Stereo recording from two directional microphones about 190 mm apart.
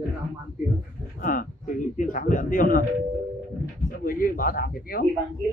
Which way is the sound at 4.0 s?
45° left (ahead or behind).